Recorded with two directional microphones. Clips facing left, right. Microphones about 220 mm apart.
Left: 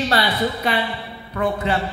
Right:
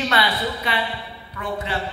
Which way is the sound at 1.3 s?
55° left (ahead or behind).